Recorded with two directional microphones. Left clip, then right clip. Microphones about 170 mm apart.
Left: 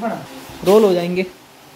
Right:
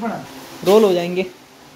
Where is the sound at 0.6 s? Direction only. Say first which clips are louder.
Left 1 dB; centre (ahead or behind).